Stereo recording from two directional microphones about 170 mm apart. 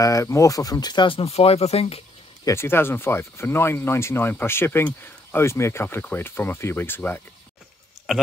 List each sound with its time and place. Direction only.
0.0 s speech: 20° left (ahead or behind); by 2.0 s 35° left (ahead or behind)
2.4 s speech: 15° left (ahead or behind)